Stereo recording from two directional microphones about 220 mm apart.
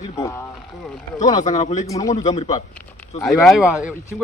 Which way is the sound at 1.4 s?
30° left (ahead or behind).